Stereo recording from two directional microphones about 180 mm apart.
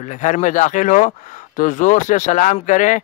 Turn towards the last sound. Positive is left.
turn(degrees=45)  # may be behind; listen again after turning